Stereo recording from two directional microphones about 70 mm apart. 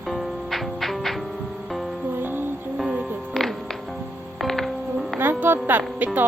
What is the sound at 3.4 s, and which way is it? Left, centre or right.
Music, centre.